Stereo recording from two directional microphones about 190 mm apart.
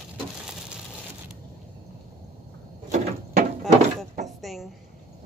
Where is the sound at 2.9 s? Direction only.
45° right (ahead or behind).